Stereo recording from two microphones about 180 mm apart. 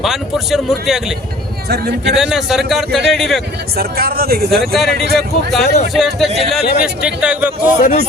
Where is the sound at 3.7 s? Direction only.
60° right (ahead or behind).